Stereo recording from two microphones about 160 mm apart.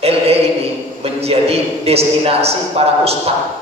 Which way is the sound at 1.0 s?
40° right (ahead or behind).